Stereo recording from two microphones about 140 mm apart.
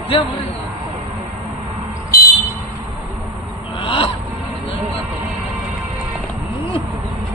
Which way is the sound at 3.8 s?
40° left (ahead or behind).